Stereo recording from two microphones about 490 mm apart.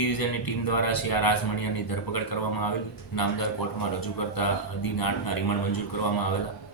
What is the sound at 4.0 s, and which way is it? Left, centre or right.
Speech, left.